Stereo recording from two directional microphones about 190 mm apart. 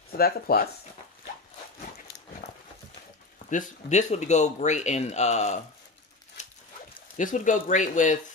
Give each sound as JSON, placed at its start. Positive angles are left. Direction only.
{"t": 0.2, "sound": "speech", "side_deg": 55}
{"t": 2.4, "sound": "dog", "side_deg": 35}
{"t": 3.4, "sound": "speech", "side_deg": 40}
{"t": 6.4, "sound": "dog", "side_deg": 40}
{"t": 7.2, "sound": "speech", "side_deg": 40}